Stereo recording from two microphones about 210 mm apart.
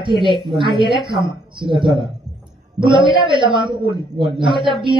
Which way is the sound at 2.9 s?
25° right (ahead or behind).